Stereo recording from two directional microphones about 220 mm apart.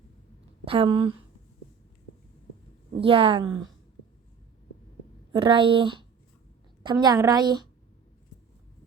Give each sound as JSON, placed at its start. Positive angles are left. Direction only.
{"t": 0.6, "sound": "speech", "side_deg": -25}
{"t": 3.0, "sound": "speech", "side_deg": -25}
{"t": 5.3, "sound": "speech", "side_deg": -20}